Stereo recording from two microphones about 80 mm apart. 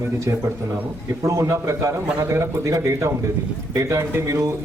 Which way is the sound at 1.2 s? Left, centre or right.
Right.